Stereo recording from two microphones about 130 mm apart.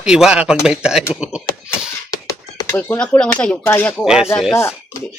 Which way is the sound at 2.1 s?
25° left (ahead or behind).